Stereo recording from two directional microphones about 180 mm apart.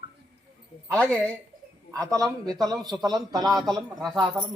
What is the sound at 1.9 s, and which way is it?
A man's voice, 20° right (ahead or behind).